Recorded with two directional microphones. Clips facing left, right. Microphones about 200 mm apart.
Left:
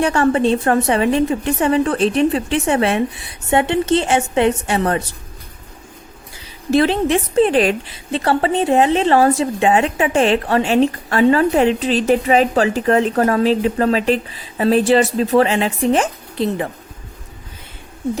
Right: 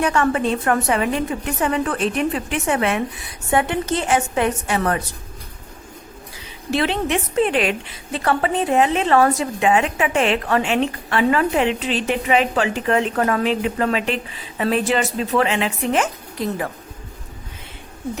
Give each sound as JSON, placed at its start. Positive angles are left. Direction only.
{"t": 0.0, "sound": "a woman's voice", "side_deg": 30}
{"t": 6.7, "sound": "a woman's voice", "side_deg": 40}